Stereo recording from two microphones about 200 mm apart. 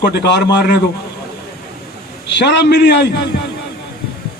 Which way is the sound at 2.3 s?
60° left (ahead or behind).